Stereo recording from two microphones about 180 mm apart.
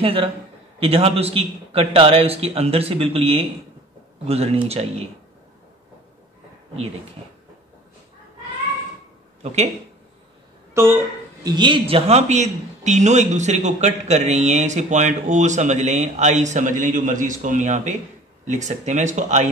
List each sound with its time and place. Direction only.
0.0 s speech: 30° right (ahead or behind)
4.6 s speech: 35° right (ahead or behind)
10.7 s speech: 15° right (ahead or behind)
11.4 s speech: 25° right (ahead or behind); by 19.4 s 40° right (ahead or behind)